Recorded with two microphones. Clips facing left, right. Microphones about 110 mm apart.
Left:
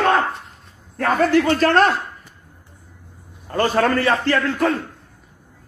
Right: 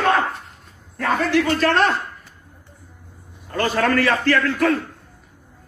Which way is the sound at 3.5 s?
35° left (ahead or behind).